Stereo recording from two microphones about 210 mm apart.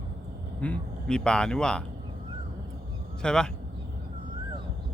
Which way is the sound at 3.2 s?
5° left (ahead or behind).